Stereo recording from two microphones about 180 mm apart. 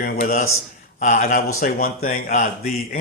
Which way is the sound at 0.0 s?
50° left (ahead or behind).